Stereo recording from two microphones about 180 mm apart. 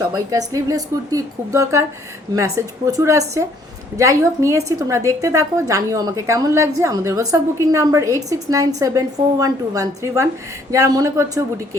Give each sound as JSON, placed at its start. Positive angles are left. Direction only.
{"t": 0.1, "sound": "a woman's voice", "side_deg": -20}